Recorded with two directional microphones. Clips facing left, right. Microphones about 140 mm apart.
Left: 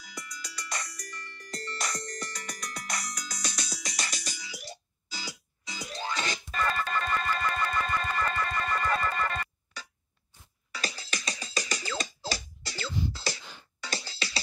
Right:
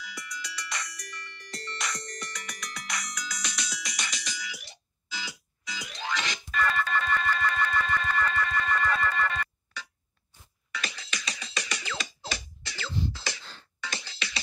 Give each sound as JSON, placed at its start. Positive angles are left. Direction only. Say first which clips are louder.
{"t": 0.0, "sound": "music", "louder": "right 3 dB", "side_deg": 50}
{"t": 2.6, "sound": "ringtone", "louder": "left 1 dB", "side_deg": 45}
{"t": 4.4, "sound": "music", "louder": "even", "side_deg": 35}
{"t": 13.4, "sound": "music", "louder": "left 1 dB", "side_deg": 10}
{"t": 13.7, "sound": "music", "louder": "left 2 dB", "side_deg": 35}